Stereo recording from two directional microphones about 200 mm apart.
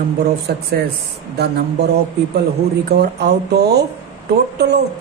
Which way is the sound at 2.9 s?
55° right (ahead or behind).